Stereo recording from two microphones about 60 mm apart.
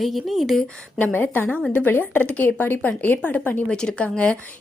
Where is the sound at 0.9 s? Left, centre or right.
Left.